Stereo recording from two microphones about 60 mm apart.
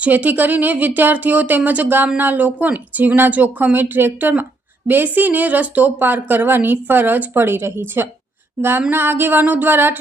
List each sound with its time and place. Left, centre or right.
0.0 s speech: right